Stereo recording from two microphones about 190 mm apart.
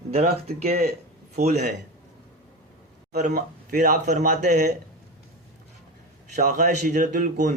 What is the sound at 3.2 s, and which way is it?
Speech, 45° right (ahead or behind).